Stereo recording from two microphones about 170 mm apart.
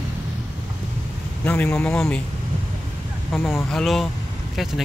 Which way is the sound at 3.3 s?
Centre (ahead or behind).